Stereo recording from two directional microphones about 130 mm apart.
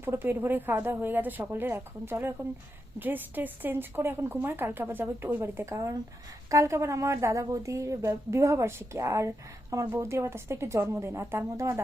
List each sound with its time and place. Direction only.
0.0 s a woman's voice: 15° right (ahead or behind)